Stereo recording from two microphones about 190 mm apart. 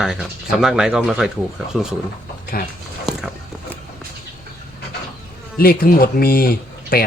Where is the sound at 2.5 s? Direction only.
50° left (ahead or behind).